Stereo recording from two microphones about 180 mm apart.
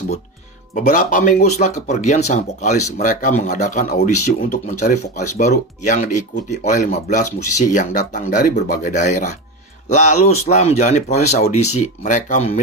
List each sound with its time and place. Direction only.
0.7 s speech: 45° left (ahead or behind)